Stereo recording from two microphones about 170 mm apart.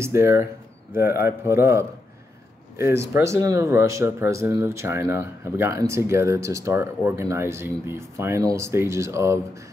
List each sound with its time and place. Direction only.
0.0 s speech: 15° right (ahead or behind)